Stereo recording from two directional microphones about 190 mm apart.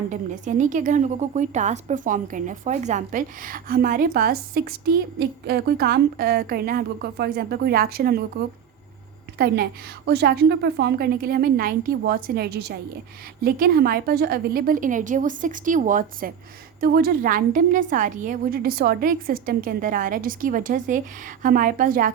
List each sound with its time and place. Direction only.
0.1 s a woman's voice: 40° right (ahead or behind)
10.1 s a woman's voice: 55° right (ahead or behind)